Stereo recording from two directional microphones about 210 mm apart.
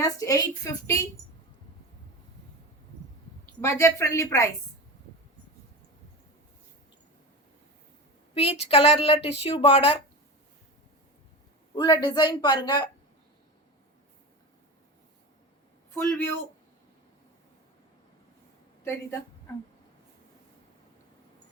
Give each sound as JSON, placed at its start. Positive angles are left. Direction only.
{"t": 0.0, "sound": "a woman's voice", "side_deg": 15}
{"t": 3.6, "sound": "a woman's voice", "side_deg": 15}
{"t": 8.4, "sound": "speech", "side_deg": 30}
{"t": 11.7, "sound": "speech", "side_deg": 20}
{"t": 16.0, "sound": "a woman's voice", "side_deg": 10}